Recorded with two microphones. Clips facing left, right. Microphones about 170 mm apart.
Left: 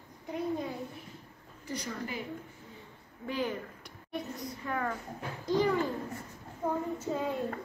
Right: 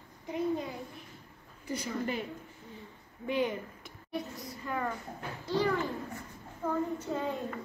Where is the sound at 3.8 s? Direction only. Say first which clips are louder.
Right 1 dB; centre (ahead or behind).